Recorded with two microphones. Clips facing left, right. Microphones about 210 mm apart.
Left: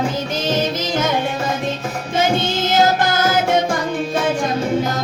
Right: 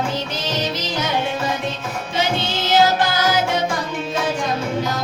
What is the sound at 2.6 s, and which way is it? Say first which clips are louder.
Music: right 1 dB; 50° left (ahead or behind).